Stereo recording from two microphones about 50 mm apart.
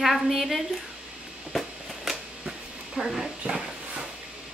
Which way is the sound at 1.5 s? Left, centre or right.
Centre.